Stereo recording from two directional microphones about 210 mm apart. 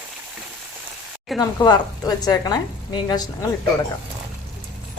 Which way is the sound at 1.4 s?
20° left (ahead or behind).